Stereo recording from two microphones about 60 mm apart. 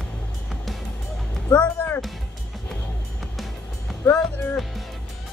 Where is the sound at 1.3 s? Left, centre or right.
Centre.